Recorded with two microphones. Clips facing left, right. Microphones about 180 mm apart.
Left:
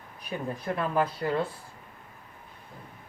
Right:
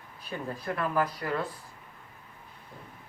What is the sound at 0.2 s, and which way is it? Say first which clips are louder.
Speech: left 2 dB; 15° left (ahead or behind).